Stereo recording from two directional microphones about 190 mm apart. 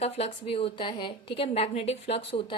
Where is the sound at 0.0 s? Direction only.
30° left (ahead or behind).